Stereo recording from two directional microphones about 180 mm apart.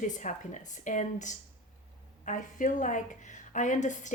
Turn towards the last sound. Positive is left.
turn(degrees=45)  # may be behind; listen again after turning